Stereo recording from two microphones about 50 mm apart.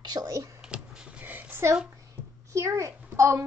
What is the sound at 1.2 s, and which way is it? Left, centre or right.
Speech, right.